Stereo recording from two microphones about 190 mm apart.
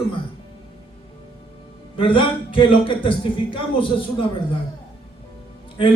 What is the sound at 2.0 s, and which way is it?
A man's voice, 25° left (ahead or behind).